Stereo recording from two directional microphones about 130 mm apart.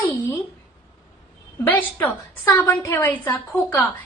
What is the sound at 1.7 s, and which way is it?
Speech, 15° left (ahead or behind).